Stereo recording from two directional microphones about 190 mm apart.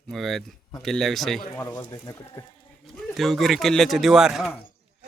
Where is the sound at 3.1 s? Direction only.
Centre (ahead or behind).